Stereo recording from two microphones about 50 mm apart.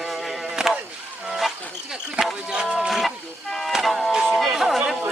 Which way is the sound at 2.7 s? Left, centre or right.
Centre.